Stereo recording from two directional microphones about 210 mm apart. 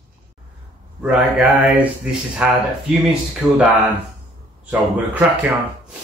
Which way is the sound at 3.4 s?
Centre (ahead or behind).